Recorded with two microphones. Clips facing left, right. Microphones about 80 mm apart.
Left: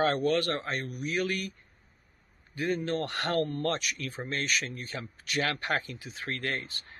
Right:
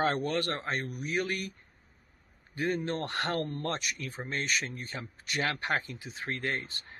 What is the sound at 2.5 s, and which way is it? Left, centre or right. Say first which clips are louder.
Speech: left 1 dB; right.